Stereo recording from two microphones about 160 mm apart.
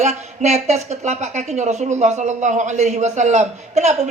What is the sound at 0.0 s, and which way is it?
A man's voice, 45° right (ahead or behind).